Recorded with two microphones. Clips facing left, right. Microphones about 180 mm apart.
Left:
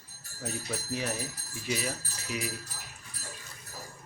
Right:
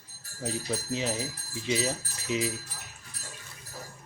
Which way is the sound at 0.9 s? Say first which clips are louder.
Right 1 dB; 20° right (ahead or behind).